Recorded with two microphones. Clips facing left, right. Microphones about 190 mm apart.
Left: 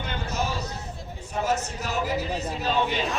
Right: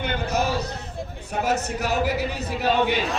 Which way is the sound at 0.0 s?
65° right (ahead or behind).